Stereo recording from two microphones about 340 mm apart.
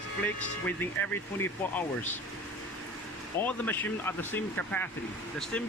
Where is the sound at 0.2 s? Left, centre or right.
Centre.